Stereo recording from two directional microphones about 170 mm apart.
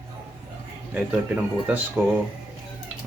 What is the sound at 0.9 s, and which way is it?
Speech, 10° right (ahead or behind).